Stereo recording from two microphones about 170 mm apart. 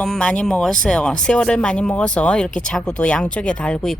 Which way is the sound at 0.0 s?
5° left (ahead or behind).